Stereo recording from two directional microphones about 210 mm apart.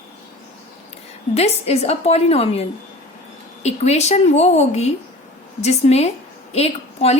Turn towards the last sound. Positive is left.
turn(degrees=30)  # may be behind; listen again after turning